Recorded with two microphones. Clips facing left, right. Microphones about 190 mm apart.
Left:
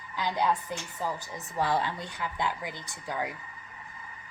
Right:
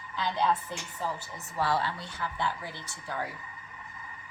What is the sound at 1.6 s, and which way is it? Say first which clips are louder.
Speech: left 1 dB; 15° left (ahead or behind).